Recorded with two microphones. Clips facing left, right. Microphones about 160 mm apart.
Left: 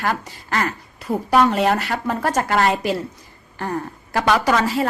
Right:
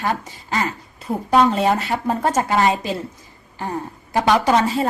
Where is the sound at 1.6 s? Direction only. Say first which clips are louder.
Right 1 dB; 20° right (ahead or behind).